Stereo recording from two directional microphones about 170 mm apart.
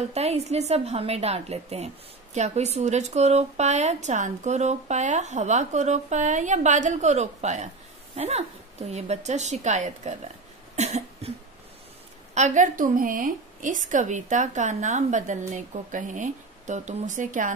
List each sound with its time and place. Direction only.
0.1 s a woman's voice: 40° right (ahead or behind)
10.8 s cough: 40° right (ahead or behind)
12.4 s a woman's voice: 45° right (ahead or behind)